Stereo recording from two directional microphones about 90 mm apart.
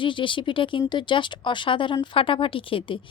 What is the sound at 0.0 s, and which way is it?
A woman's voice, 70° left (ahead or behind).